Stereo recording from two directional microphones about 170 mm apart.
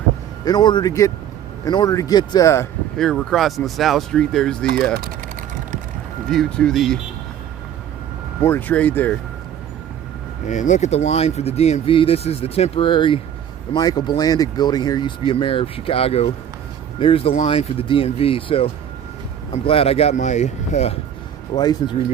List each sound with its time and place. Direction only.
0.4 s speech: 25° left (ahead or behind)
3.0 s speech: 5° left (ahead or behind)
6.3 s speech: 5° left (ahead or behind)
8.4 s speech: 10° left (ahead or behind)
10.4 s speech: 45° left (ahead or behind)
21.5 s speech: 25° left (ahead or behind)